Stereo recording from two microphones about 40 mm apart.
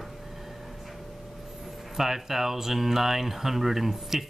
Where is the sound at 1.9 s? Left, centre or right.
Centre.